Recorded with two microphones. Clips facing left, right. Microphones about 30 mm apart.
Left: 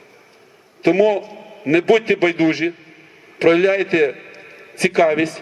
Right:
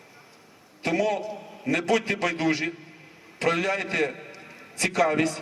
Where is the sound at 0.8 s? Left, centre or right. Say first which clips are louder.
Left 10 dB; left.